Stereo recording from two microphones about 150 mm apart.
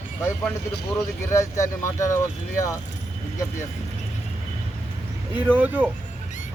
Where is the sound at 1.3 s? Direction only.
20° left (ahead or behind).